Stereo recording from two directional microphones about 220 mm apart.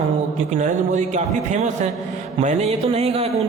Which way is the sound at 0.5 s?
35° right (ahead or behind).